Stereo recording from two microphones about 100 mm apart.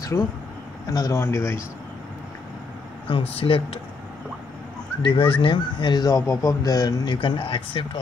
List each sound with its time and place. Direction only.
0.1 s speech: 25° left (ahead or behind)
3.1 s speech: 65° left (ahead or behind)
5.0 s speech: 60° left (ahead or behind)